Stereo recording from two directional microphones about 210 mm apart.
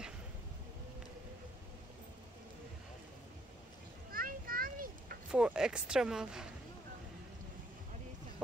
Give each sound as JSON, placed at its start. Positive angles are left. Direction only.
{"t": 4.1, "sound": "children playing", "side_deg": -45}
{"t": 5.3, "sound": "speech", "side_deg": -5}